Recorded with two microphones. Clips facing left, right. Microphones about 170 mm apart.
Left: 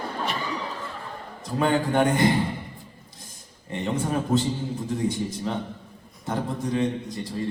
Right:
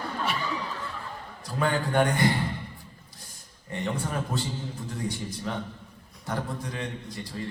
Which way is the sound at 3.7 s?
20° left (ahead or behind).